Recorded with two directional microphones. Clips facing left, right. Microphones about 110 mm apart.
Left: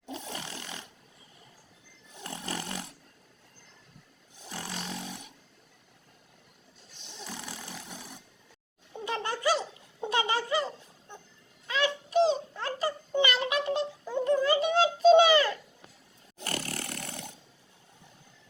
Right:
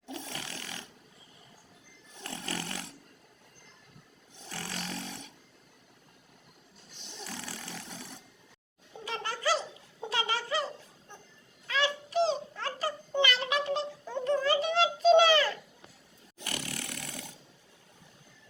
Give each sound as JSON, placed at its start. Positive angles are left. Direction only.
{"t": 0.0, "sound": "snoring", "side_deg": 15}
{"t": 2.1, "sound": "snoring", "side_deg": 15}
{"t": 4.4, "sound": "snoring", "side_deg": 15}
{"t": 7.3, "sound": "snoring", "side_deg": 20}
{"t": 9.0, "sound": "a sound", "side_deg": 20}
{"t": 11.7, "sound": "dog", "side_deg": 20}
{"t": 14.0, "sound": "a sound", "side_deg": 15}
{"t": 16.4, "sound": "chainsaw", "side_deg": 40}